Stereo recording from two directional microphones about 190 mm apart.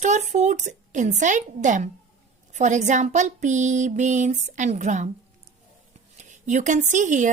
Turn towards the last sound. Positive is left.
turn(degrees=-40)  # may be behind; listen again after turning